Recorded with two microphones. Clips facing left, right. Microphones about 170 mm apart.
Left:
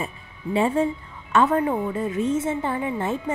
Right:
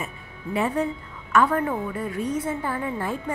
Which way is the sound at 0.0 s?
25° left (ahead or behind).